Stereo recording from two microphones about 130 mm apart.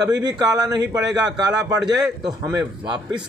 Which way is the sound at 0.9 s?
5° right (ahead or behind).